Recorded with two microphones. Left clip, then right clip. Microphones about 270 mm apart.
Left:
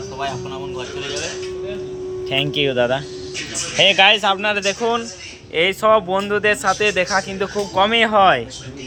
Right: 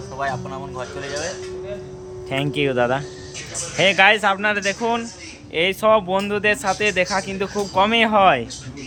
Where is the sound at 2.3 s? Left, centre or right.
Centre.